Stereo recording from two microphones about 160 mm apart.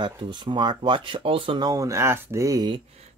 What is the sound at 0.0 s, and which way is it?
Speech, 30° right (ahead or behind).